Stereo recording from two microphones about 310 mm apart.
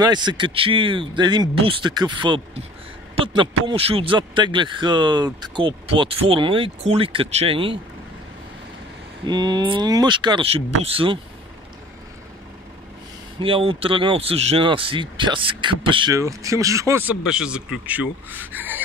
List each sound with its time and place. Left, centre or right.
0.0 s speech: centre
3.6 s speech: centre
9.2 s speech: centre
13.4 s speech: centre